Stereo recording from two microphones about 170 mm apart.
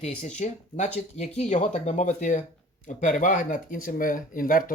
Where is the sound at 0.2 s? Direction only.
45° left (ahead or behind).